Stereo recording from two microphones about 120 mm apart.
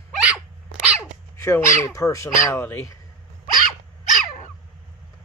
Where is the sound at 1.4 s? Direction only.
20° left (ahead or behind).